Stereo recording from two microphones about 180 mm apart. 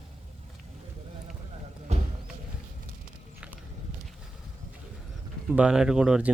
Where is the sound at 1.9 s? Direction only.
40° right (ahead or behind).